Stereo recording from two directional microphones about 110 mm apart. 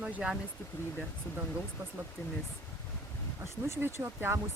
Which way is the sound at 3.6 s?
20° right (ahead or behind).